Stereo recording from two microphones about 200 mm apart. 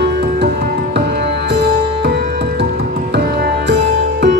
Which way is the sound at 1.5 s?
60° right (ahead or behind).